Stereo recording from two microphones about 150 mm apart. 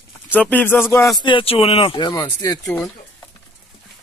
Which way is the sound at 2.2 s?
20° left (ahead or behind).